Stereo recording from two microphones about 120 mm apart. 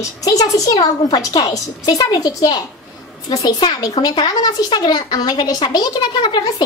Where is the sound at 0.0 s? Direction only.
30° left (ahead or behind).